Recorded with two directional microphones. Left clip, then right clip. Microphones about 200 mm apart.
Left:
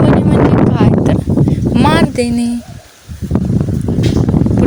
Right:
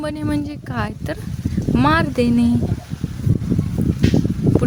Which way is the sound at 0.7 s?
Centre (ahead or behind).